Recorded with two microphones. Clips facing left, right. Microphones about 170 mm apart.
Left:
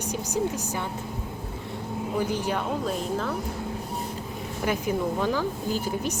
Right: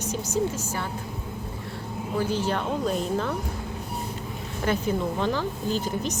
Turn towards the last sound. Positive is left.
turn(degrees=10)  # may be behind; listen again after turning